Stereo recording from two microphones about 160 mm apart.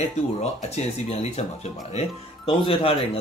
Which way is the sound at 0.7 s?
45° left (ahead or behind).